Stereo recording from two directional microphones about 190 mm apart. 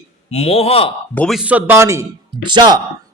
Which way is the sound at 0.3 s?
35° left (ahead or behind).